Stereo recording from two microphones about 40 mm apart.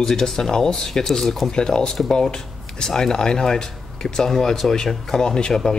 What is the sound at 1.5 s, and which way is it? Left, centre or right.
Speech, centre.